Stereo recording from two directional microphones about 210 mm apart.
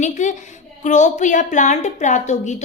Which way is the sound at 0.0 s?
35° left (ahead or behind).